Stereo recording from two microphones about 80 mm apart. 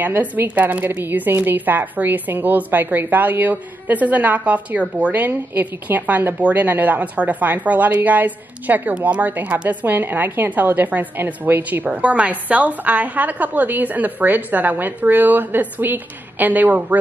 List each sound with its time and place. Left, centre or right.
0.0 s a woman's voice: right